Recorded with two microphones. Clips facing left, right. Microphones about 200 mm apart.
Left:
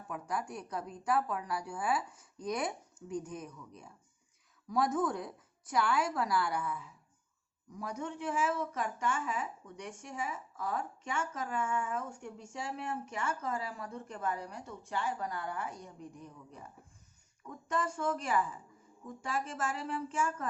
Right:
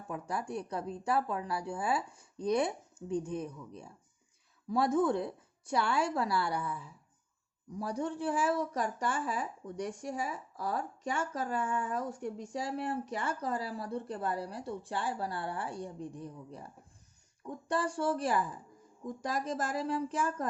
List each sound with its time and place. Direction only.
0.1 s speech: 30° right (ahead or behind)